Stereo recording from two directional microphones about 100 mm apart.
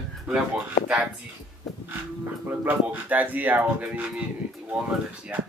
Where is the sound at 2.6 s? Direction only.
20° right (ahead or behind).